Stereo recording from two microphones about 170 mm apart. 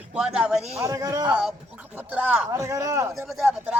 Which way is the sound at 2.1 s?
10° right (ahead or behind).